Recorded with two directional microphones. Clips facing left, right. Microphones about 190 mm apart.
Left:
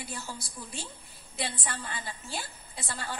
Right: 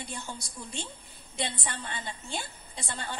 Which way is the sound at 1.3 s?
5° left (ahead or behind).